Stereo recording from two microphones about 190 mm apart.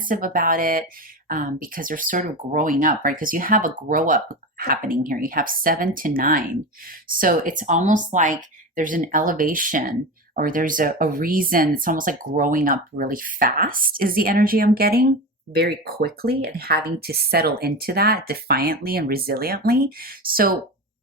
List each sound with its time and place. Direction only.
0.0 s speech: 45° right (ahead or behind)